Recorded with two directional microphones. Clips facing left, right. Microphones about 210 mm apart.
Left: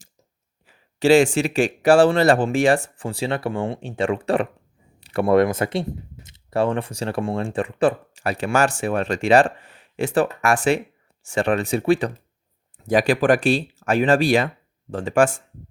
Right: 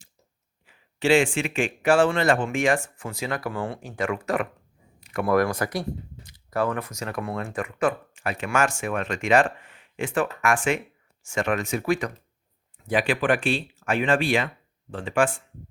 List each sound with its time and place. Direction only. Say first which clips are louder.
0.7 s speech: left 5 dB; 40° left (ahead or behind)